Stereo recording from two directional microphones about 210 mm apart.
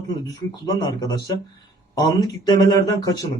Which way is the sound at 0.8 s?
20° left (ahead or behind).